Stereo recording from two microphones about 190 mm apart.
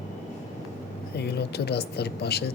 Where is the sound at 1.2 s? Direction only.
60° left (ahead or behind).